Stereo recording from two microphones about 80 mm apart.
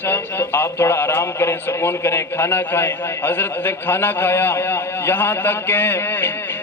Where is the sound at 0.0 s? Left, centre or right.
Left.